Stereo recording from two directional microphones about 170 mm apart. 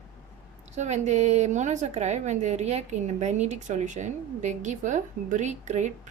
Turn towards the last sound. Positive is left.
turn(degrees=-45)  # may be behind; listen again after turning